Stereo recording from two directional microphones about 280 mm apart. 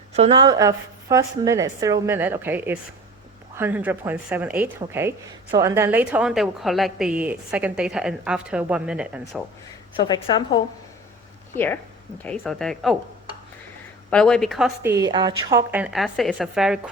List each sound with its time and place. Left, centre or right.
0.1 s a woman's voice: centre
10.0 s a woman's voice: centre
14.1 s a woman's voice: centre
14.9 s a woman's voice: centre